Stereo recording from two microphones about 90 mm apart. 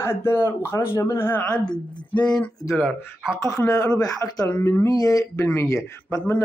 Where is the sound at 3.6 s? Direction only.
35° left (ahead or behind).